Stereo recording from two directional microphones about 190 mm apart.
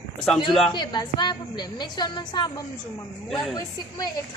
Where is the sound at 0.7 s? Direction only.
25° left (ahead or behind).